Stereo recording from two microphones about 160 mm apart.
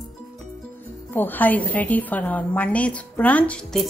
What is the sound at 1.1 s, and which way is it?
A woman's voice, 10° left (ahead or behind).